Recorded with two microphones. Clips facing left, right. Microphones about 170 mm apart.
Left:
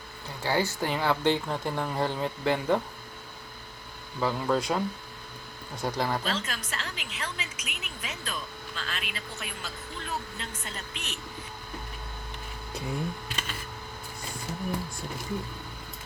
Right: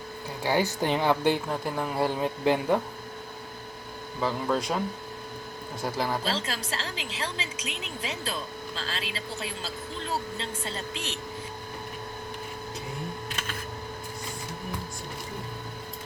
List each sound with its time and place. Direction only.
0.4 s speech: 15° right (ahead or behind)
4.2 s speech: centre (ahead or behind)
5.8 s speech: centre (ahead or behind)
6.2 s a woman's voice: 30° right (ahead or behind)